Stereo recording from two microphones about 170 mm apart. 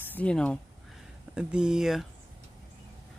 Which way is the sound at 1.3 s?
5° right (ahead or behind).